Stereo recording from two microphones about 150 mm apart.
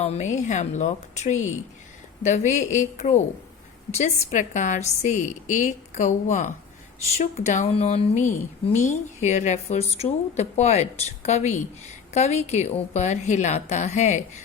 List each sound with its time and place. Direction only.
0.0 s speech: 50° left (ahead or behind)